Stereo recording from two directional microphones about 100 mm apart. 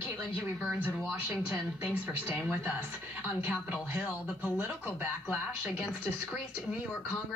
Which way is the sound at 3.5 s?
15° right (ahead or behind).